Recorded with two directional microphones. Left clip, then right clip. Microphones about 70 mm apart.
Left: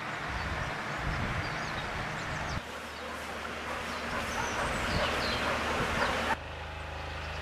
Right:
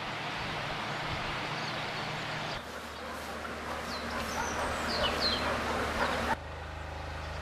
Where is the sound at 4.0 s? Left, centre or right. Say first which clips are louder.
Left 1 dB; centre.